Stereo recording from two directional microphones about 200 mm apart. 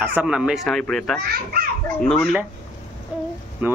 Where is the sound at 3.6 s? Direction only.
10° right (ahead or behind).